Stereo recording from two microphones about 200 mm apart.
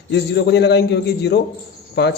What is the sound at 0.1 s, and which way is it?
Speech, 60° left (ahead or behind).